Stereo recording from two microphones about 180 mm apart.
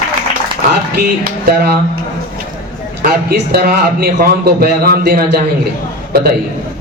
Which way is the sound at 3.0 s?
55° right (ahead or behind).